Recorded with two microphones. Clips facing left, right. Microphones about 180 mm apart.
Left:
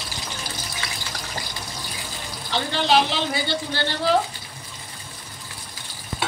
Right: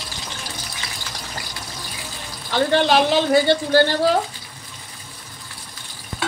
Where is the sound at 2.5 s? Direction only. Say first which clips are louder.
Right 5 dB; 50° right (ahead or behind).